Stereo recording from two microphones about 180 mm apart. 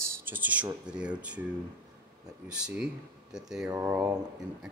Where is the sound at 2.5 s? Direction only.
5° right (ahead or behind).